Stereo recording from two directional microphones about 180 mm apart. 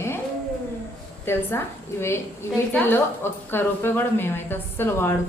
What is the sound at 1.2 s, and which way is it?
A woman's voice, 10° left (ahead or behind).